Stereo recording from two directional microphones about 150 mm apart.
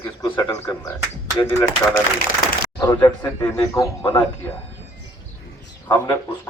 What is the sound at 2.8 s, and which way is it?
A man's voice, 25° left (ahead or behind).